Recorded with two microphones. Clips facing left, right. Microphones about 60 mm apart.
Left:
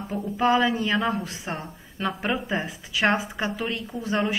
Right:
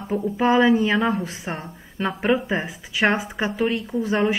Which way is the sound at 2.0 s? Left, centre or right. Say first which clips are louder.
Right 5 dB; centre.